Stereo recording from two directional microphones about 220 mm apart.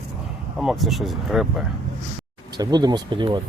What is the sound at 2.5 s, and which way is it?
Speech, 20° right (ahead or behind).